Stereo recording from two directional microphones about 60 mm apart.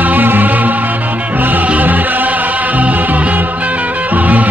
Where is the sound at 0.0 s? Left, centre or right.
Right.